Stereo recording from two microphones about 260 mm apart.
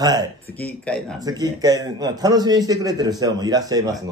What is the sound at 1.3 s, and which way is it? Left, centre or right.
A man's voice, centre.